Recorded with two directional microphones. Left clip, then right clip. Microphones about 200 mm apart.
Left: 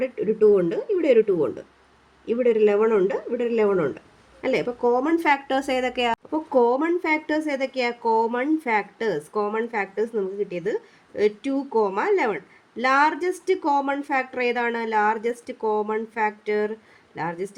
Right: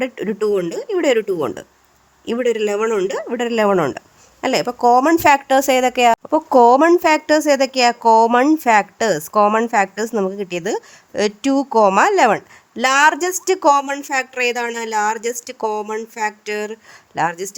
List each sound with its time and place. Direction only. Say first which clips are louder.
0.0 s speech: left 1 dB; 45° right (ahead or behind)